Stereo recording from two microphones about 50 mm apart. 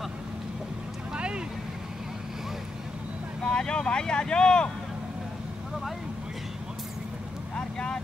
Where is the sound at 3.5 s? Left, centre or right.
Centre.